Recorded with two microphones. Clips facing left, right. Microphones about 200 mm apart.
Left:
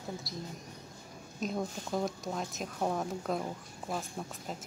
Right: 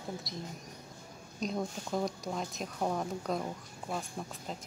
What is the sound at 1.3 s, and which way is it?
Speech, centre (ahead or behind).